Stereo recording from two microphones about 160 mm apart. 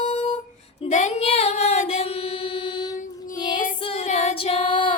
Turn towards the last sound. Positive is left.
turn(degrees=30)  # may be behind; listen again after turning